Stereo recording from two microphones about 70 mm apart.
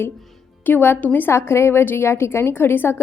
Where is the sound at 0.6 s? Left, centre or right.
Left.